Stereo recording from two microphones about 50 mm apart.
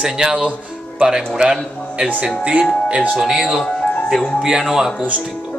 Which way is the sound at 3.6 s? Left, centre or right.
Left.